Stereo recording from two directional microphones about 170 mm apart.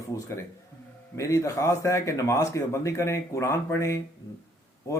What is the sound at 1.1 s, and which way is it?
A man's voice, 15° left (ahead or behind).